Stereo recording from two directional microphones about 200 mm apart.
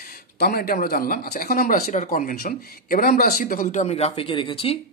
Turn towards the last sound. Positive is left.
turn(degrees=25)  # may be behind; listen again after turning